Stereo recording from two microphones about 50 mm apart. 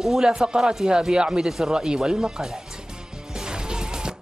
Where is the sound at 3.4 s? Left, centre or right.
Centre.